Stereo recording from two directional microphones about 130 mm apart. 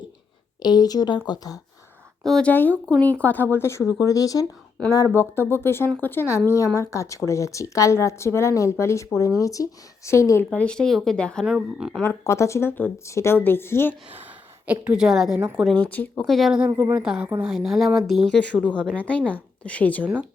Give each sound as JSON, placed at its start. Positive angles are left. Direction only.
{"t": 0.6, "sound": "a woman's voice", "side_deg": 30}
{"t": 2.2, "sound": "a woman's voice", "side_deg": 5}
{"t": 10.5, "sound": "speech", "side_deg": 10}
{"t": 11.4, "sound": "speech", "side_deg": -5}
{"t": 12.0, "sound": "a woman's voice", "side_deg": 20}
{"t": 14.7, "sound": "speech", "side_deg": -5}
{"t": 15.7, "sound": "a woman's voice", "side_deg": 10}